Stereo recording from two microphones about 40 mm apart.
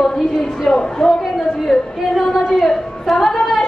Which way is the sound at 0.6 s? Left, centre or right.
Centre.